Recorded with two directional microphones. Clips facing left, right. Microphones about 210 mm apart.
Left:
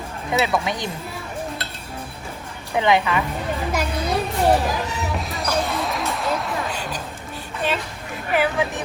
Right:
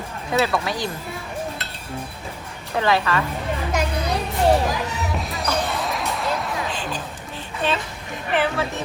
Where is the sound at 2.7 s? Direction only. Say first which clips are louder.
Left 2 dB; 20° left (ahead or behind).